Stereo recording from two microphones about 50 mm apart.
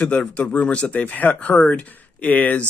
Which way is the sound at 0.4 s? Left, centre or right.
Left.